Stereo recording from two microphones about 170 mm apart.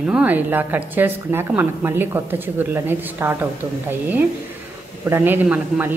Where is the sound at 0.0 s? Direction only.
10° right (ahead or behind).